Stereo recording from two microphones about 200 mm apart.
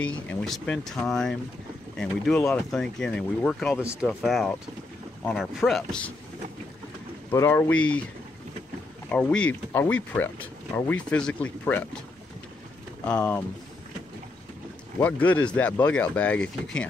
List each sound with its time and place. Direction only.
0.3 s speech: 5° left (ahead or behind)
7.2 s speech: 10° left (ahead or behind)
9.1 s speech: 5° left (ahead or behind)
13.0 s speech: 10° left (ahead or behind)
15.0 s speech: 5° left (ahead or behind)